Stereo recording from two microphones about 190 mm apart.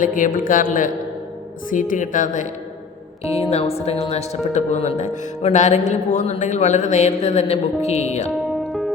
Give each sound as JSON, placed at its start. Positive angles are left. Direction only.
{"t": 0.0, "sound": "speech", "side_deg": 45}
{"t": 8.6, "sound": "music", "side_deg": 0}